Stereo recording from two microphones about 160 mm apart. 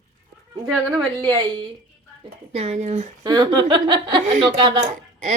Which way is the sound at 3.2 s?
25° right (ahead or behind).